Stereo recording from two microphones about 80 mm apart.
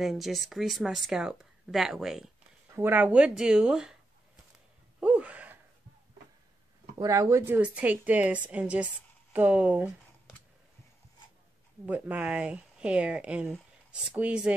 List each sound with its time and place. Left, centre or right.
0.0 s speech: centre
2.7 s speech: right; by 3.9 s centre
5.0 s gasp: centre
7.1 s speech: right
7.4 s a woman's voice: right
11.8 s speech: right